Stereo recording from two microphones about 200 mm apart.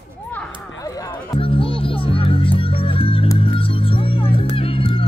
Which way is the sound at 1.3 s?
25° left (ahead or behind).